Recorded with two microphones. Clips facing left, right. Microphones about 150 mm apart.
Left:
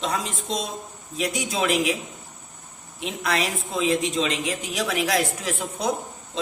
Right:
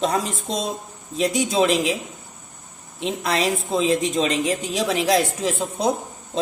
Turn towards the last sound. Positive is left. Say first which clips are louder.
# right 5 dB
turn(degrees=-30)  # may be behind; listen again after turning